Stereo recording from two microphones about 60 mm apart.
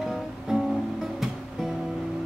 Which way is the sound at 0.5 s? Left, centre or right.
Centre.